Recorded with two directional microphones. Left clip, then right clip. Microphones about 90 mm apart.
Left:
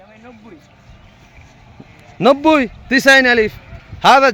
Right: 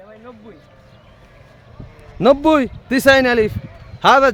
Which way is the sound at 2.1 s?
15° right (ahead or behind).